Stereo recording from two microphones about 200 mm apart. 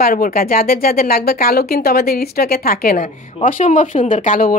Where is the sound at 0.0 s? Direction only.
45° left (ahead or behind).